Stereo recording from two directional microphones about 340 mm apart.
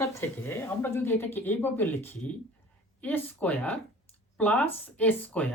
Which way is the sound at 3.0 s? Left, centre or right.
Centre.